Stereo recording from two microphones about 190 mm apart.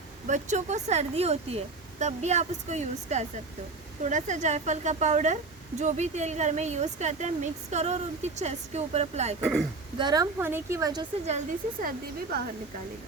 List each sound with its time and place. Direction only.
0.3 s speech: 40° right (ahead or behind)
9.4 s speech: 5° left (ahead or behind)
10.0 s a woman's voice: 20° right (ahead or behind)
11.8 s speech: 45° right (ahead or behind)